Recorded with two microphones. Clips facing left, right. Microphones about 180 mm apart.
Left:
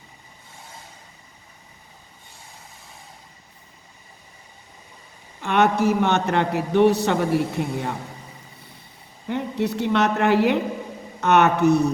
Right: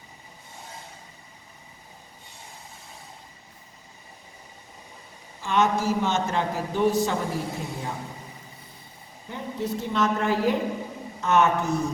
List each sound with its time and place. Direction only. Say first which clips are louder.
5.4 s a man's voice: left 4 dB; 65° left (ahead or behind)
9.3 s a man's voice: left 6 dB; 70° left (ahead or behind)